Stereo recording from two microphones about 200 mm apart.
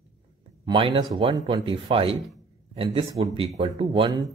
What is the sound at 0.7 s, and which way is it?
Speech, 25° right (ahead or behind).